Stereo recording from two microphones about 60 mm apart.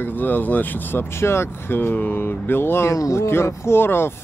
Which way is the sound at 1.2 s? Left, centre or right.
Left.